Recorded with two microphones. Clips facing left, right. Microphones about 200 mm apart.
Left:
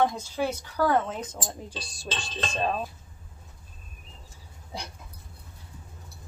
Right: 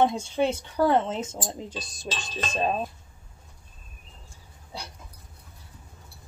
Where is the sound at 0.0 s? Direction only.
25° right (ahead or behind).